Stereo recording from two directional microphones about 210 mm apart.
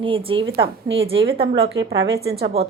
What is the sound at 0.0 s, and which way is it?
A woman's voice, 25° right (ahead or behind).